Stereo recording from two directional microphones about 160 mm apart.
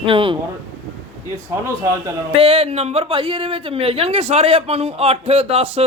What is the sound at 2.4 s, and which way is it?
A woman's voice, 35° right (ahead or behind).